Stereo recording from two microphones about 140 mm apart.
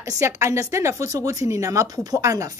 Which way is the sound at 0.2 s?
20° right (ahead or behind).